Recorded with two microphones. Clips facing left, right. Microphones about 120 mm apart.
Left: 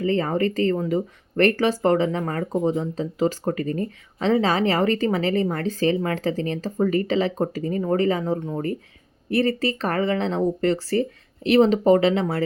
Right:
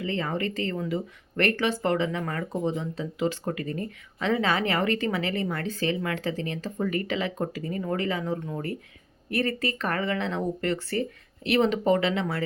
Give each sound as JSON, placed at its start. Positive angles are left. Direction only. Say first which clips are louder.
{"t": 0.0, "sound": "speech", "louder": "left 7 dB", "side_deg": 40}